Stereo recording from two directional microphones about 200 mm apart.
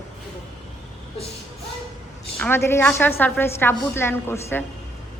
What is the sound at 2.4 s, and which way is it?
A woman's voice, 10° left (ahead or behind).